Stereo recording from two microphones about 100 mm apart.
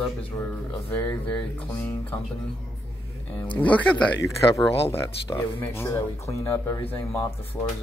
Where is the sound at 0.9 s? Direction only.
20° left (ahead or behind).